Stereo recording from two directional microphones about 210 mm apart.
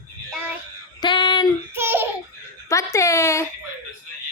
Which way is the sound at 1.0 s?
20° left (ahead or behind).